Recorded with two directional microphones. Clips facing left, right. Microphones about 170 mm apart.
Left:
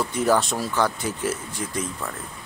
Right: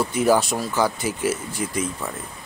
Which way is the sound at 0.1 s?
5° right (ahead or behind).